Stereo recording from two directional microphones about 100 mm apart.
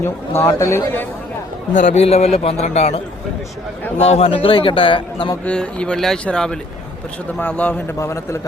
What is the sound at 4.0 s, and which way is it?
A man's voice, 85° left.